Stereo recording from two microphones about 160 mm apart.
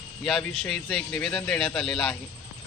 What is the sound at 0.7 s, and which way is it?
Speech, centre (ahead or behind).